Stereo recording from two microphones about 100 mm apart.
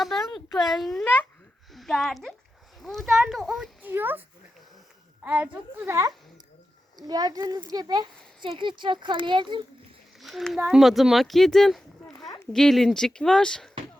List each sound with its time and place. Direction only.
0.0 s a sound: centre (ahead or behind)
0.5 s a woman's voice: centre (ahead or behind)
3.8 s speech: 20° right (ahead or behind)
5.2 s a woman's voice: 15° right (ahead or behind)
5.9 s a child's voice: 35° right (ahead or behind); by 9.6 s 50° right (ahead or behind)
10.2 s a child's voice: centre (ahead or behind)